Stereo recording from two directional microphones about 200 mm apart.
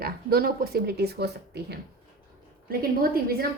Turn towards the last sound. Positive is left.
turn(degrees=-50)  # may be behind; listen again after turning